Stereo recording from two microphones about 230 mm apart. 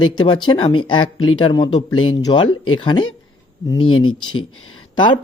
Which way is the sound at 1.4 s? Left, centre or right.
Centre.